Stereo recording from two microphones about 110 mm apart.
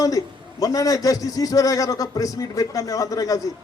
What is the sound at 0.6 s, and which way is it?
A man's voice, 35° left (ahead or behind).